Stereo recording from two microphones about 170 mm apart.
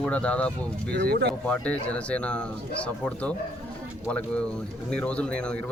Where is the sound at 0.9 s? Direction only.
75° right (ahead or behind).